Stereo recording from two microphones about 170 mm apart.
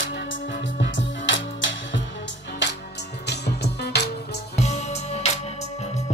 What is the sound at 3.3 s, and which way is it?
Music, 80° left.